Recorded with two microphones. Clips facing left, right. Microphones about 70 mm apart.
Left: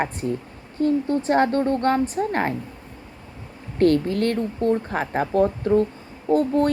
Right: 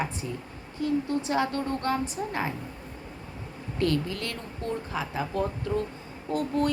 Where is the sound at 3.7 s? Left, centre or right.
Left.